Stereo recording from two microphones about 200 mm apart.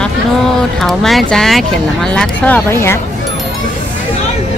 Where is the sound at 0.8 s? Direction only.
Centre (ahead or behind).